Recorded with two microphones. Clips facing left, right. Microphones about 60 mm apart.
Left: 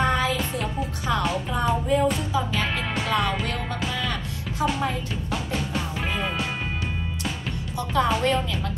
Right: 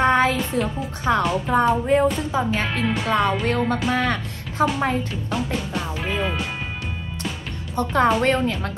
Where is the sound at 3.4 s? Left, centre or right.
Right.